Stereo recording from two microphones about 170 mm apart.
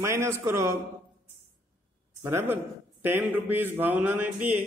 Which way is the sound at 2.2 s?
15° right (ahead or behind).